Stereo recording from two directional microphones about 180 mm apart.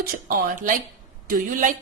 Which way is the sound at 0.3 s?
50° right (ahead or behind).